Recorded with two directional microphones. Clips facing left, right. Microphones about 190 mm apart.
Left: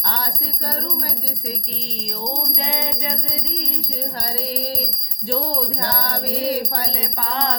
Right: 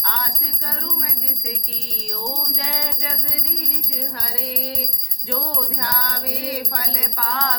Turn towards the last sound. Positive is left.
turn(degrees=25)  # may be behind; listen again after turning